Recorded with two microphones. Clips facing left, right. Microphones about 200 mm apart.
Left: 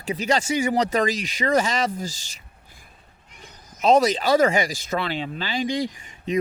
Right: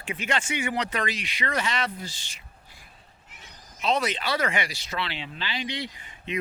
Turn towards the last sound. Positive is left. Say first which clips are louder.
# left 7 dB
turn(degrees=45)  # may be behind; listen again after turning